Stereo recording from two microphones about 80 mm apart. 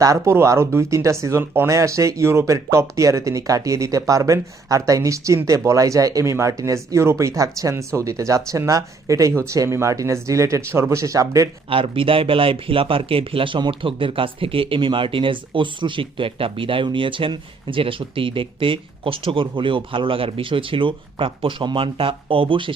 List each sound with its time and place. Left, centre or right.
0.0 s speech: right
11.8 s speech: right